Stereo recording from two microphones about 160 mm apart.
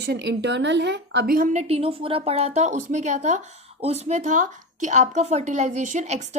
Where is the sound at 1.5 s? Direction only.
40° right (ahead or behind).